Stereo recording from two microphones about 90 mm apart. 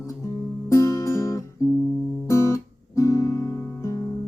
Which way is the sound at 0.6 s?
35° left (ahead or behind).